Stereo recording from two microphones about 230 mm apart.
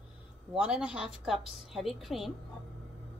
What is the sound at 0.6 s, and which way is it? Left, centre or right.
A woman's voice, centre.